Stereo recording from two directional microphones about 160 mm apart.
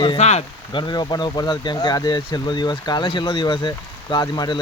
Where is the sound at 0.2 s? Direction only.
45° left (ahead or behind).